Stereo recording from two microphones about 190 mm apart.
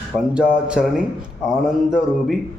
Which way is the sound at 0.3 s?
5° right (ahead or behind).